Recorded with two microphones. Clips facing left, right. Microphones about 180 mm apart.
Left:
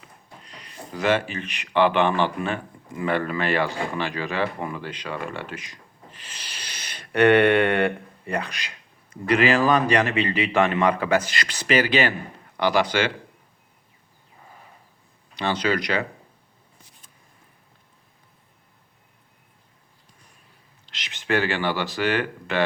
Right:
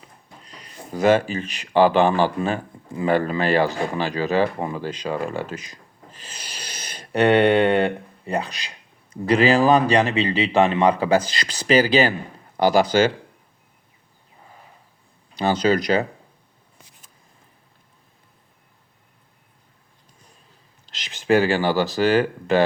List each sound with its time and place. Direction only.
0.5 s speech: 40° right (ahead or behind)
15.4 s speech: 40° right (ahead or behind)
20.9 s speech: 40° right (ahead or behind)